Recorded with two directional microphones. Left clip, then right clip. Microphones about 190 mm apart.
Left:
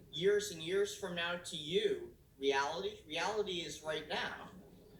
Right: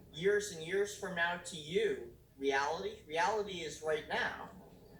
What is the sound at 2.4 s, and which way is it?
Speech, 15° left (ahead or behind).